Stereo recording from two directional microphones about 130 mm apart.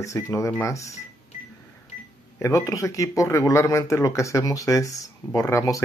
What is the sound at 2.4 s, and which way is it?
Speech, 25° left (ahead or behind).